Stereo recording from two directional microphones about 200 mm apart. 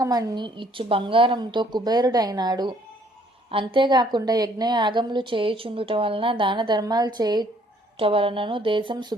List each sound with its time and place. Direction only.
0.0 s a woman's voice: 20° right (ahead or behind)